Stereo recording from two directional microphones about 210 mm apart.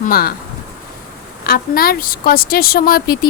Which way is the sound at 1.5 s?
45° left (ahead or behind).